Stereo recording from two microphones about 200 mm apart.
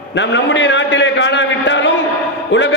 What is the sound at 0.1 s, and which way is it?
A man's voice, 60° left (ahead or behind).